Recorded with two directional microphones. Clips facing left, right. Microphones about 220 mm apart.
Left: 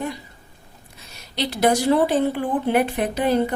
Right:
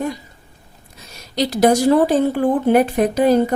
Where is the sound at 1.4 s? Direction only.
40° right (ahead or behind).